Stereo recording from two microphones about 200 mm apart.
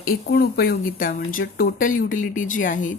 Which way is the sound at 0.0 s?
50° left (ahead or behind).